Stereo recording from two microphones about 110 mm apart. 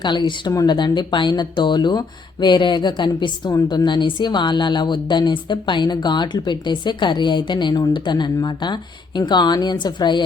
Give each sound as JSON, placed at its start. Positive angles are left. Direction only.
{"t": 0.0, "sound": "speech", "side_deg": 45}